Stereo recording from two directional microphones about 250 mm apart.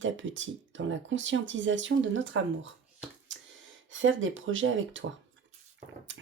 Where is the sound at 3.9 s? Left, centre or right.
Right.